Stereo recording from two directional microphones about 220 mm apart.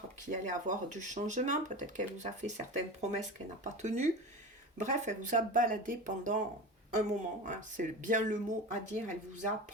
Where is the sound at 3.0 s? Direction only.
30° right (ahead or behind).